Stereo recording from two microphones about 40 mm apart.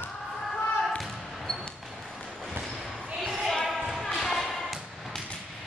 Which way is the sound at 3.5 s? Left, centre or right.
Centre.